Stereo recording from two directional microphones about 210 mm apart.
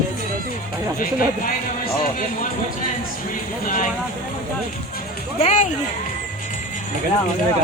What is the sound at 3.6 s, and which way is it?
Speech, 40° left (ahead or behind).